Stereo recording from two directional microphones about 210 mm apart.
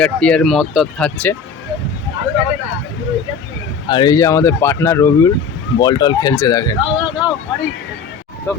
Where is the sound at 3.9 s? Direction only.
20° left (ahead or behind).